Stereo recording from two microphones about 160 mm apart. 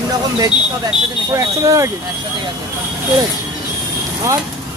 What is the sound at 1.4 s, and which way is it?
Speech, 20° right (ahead or behind).